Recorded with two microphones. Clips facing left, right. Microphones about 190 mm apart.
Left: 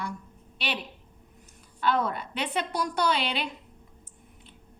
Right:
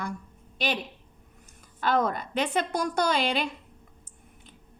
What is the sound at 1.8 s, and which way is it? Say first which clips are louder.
A woman's voice: right 1 dB; 45° right (ahead or behind).